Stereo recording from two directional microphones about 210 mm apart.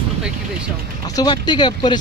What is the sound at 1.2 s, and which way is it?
Speech, 20° left (ahead or behind).